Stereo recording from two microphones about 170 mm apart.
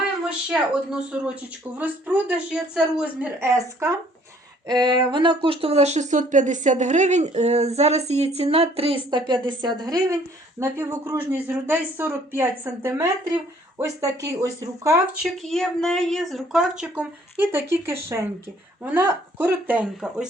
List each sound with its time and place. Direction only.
0.3 s speech: 5° right (ahead or behind)
15.2 s speech: centre (ahead or behind)